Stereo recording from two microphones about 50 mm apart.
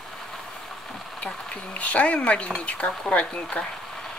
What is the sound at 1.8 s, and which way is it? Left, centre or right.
Speech, left.